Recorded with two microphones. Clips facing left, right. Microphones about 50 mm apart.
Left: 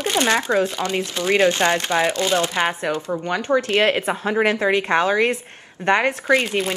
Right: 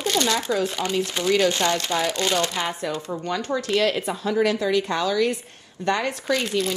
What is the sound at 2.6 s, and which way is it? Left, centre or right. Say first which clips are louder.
Speech: left 5 dB; left.